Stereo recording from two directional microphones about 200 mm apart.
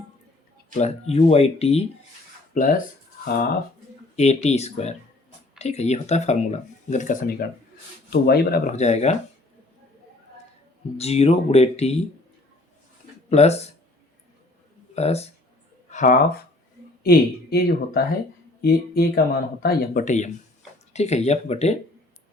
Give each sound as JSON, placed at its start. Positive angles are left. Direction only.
{"t": 0.7, "sound": "speech", "side_deg": 35}
{"t": 2.6, "sound": "speech", "side_deg": 40}
{"t": 4.1, "sound": "speech", "side_deg": 35}
{"t": 8.1, "sound": "speech", "side_deg": 50}
{"t": 8.7, "sound": "speech", "side_deg": 35}
{"t": 10.9, "sound": "speech", "side_deg": 30}
{"t": 13.3, "sound": "speech", "side_deg": 35}
{"t": 14.9, "sound": "speech", "side_deg": 30}
{"t": 15.9, "sound": "a sound", "side_deg": 40}
{"t": 17.0, "sound": "speech", "side_deg": 50}